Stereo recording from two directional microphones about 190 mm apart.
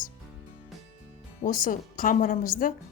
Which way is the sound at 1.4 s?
45° left (ahead or behind).